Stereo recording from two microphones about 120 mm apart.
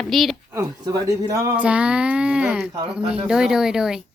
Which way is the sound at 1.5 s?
10° right (ahead or behind).